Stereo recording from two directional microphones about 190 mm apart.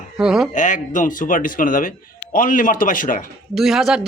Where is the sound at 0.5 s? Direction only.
40° left (ahead or behind).